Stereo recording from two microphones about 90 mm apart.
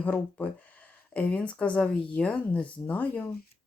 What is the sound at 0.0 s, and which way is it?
Speech, 20° left (ahead or behind).